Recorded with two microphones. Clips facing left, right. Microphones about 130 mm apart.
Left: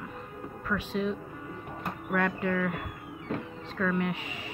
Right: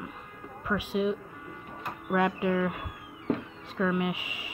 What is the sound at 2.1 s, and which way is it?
A woman's voice, 15° right (ahead or behind).